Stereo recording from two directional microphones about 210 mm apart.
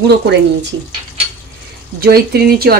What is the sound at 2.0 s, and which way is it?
Speech, 45° right (ahead or behind).